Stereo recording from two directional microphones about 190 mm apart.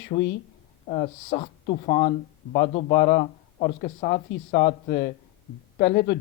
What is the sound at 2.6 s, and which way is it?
Speech, 60° left (ahead or behind).